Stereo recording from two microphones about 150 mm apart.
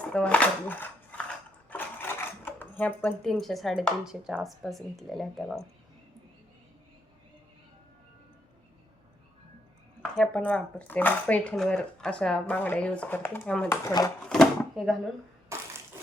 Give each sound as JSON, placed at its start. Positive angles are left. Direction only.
{"t": 0.1, "sound": "speech", "side_deg": 10}
{"t": 1.7, "sound": "sewing machine", "side_deg": 15}
{"t": 3.3, "sound": "speech", "side_deg": 0}
{"t": 10.0, "sound": "speech", "side_deg": 5}
{"t": 13.8, "sound": "speech", "side_deg": 25}
{"t": 14.3, "sound": "drawer open or close", "side_deg": 5}
{"t": 15.5, "sound": "crushing", "side_deg": -20}